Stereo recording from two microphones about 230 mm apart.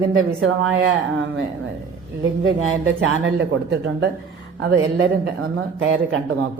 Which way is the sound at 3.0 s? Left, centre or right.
Right.